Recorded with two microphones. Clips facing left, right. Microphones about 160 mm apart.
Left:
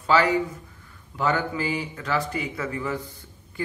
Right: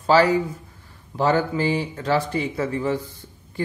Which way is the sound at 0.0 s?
35° right (ahead or behind).